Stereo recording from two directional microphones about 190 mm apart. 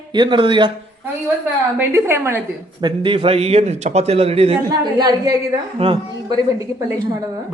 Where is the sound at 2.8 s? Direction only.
25° right (ahead or behind).